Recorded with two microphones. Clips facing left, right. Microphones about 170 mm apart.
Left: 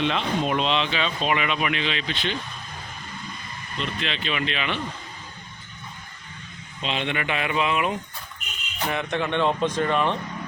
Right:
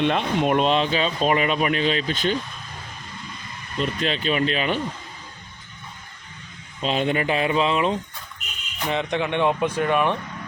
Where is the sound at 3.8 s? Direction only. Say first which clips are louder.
Right 6 dB; 40° right (ahead or behind).